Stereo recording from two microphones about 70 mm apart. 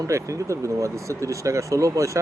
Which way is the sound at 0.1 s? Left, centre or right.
Right.